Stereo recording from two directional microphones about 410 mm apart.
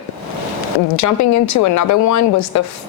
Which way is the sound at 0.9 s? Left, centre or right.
Left.